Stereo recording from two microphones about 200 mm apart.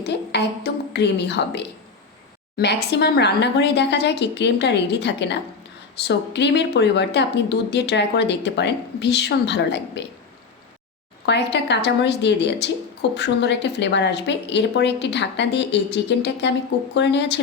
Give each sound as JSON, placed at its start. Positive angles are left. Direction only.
{"t": 0.1, "sound": "a woman's voice", "side_deg": 60}
{"t": 11.3, "sound": "speech", "side_deg": 60}